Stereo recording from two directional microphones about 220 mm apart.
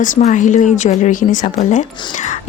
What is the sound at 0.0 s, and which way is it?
Speech, 35° left (ahead or behind).